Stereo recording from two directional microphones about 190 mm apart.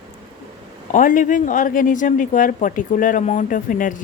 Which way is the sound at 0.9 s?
45° left (ahead or behind).